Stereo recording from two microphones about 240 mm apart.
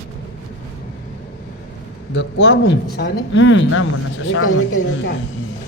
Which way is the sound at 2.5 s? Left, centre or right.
Left.